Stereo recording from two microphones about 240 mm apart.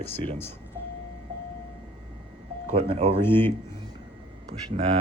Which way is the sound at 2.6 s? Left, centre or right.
Right.